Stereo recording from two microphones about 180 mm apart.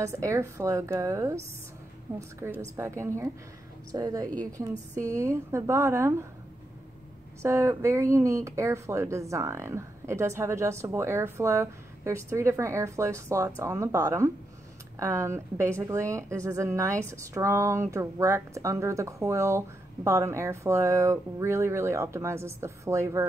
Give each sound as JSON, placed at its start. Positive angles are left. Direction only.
{"t": 0.0, "sound": "a woman's voice", "side_deg": -15}
{"t": 7.4, "sound": "a woman's voice", "side_deg": -15}